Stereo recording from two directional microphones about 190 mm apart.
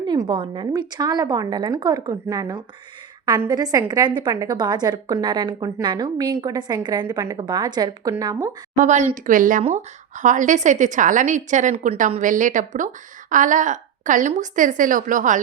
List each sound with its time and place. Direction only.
0.0 s a woman's voice: 25° right (ahead or behind)
8.7 s a woman's voice: 40° right (ahead or behind)